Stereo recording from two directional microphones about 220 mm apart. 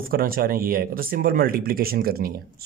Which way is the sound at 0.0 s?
40° right (ahead or behind).